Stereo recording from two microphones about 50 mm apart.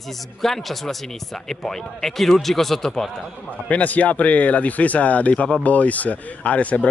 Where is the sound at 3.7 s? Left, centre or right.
Left.